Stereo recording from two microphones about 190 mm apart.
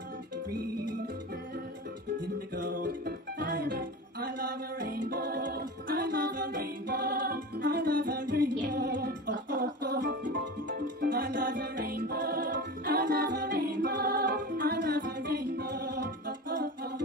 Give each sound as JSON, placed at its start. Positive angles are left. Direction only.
{"t": 2.5, "sound": "music", "side_deg": -45}